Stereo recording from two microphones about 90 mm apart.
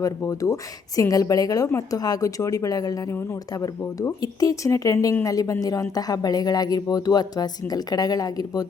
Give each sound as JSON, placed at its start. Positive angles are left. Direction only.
{"t": 0.0, "sound": "speech", "side_deg": 35}